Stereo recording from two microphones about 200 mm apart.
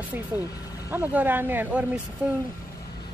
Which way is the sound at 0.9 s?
10° right (ahead or behind).